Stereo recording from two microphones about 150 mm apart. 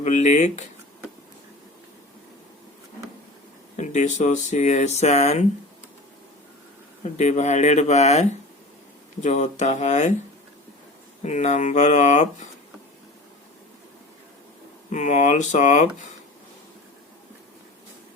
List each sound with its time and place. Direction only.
0.0 s speech: 55° left (ahead or behind)
3.8 s speech: 50° left (ahead or behind)
7.2 s speech: 50° left (ahead or behind)
11.2 s speech: 50° left (ahead or behind)
14.8 s speech: 55° left (ahead or behind)